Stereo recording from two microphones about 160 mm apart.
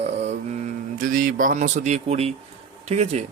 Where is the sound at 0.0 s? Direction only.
45° right (ahead or behind).